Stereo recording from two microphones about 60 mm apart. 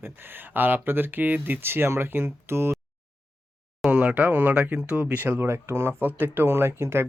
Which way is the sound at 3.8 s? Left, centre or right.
Right.